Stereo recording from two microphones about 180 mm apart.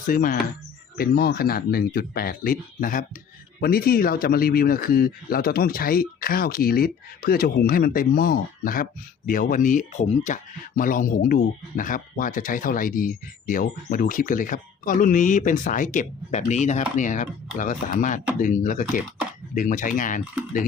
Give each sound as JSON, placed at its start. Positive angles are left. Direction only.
{"t": 0.1, "sound": "speech", "side_deg": 50}